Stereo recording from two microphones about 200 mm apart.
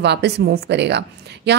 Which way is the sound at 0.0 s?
55° right (ahead or behind).